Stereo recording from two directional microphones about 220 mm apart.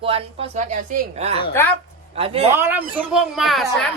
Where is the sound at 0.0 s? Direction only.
25° right (ahead or behind).